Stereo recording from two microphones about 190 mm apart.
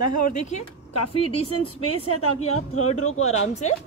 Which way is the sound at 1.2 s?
30° left (ahead or behind).